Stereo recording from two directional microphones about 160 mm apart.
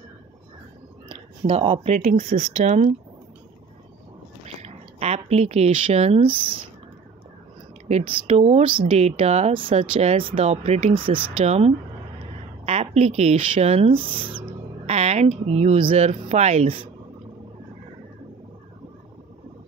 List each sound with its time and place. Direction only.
1.5 s speech: 35° right (ahead or behind)
4.6 s speech: 40° right (ahead or behind)
7.9 s speech: 40° right (ahead or behind)